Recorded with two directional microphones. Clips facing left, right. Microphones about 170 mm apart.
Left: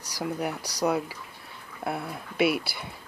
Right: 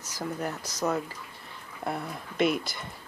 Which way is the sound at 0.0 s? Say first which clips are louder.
Left 2 dB; 10° left (ahead or behind).